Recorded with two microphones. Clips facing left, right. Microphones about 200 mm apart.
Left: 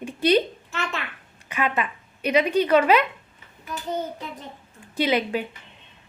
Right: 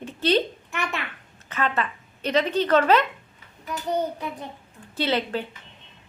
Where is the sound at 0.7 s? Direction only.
15° right (ahead or behind).